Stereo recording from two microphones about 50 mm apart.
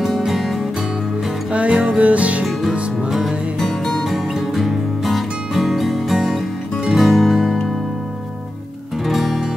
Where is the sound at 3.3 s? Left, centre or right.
Right.